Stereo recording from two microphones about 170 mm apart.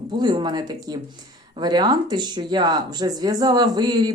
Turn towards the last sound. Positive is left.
turn(degrees=-25)  # may be behind; listen again after turning